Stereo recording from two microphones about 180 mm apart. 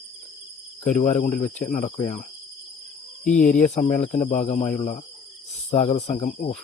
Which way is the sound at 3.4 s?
45° left (ahead or behind).